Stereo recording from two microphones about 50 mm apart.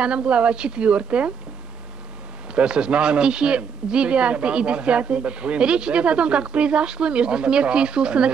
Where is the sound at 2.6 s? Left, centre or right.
Centre.